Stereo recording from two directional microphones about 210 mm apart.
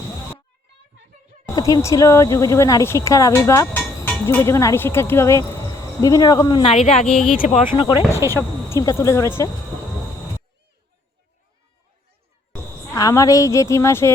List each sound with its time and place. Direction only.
1.5 s a woman's voice: 15° left (ahead or behind)
7.1 s speech: centre (ahead or behind)
7.3 s a woman's voice: 25° left (ahead or behind)
12.9 s speech: 15° left (ahead or behind)